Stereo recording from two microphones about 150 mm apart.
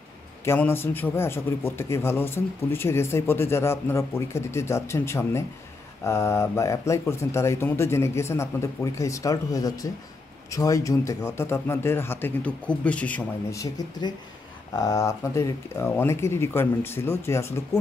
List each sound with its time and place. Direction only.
0.5 s a man's voice: 15° left (ahead or behind)
13.5 s a man's voice: 25° left (ahead or behind)